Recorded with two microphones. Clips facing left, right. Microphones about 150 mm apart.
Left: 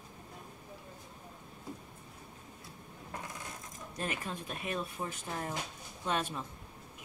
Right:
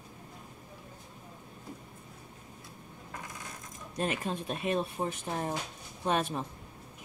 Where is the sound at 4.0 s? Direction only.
25° right (ahead or behind).